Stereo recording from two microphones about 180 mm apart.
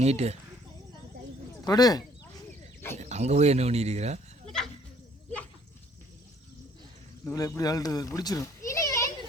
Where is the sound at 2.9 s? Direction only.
40° right (ahead or behind).